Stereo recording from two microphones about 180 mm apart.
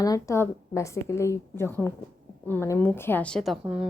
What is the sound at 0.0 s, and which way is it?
A woman's voice, 20° left (ahead or behind).